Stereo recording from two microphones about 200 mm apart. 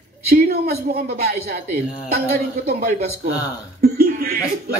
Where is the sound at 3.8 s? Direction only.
50° right (ahead or behind).